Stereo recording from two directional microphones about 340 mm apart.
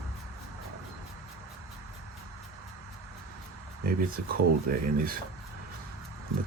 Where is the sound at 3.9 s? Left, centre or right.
Right.